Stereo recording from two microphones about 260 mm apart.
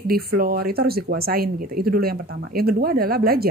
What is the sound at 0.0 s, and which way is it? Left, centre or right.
A woman's voice, right.